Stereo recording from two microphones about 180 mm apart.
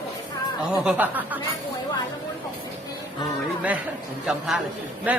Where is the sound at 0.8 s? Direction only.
5° right (ahead or behind).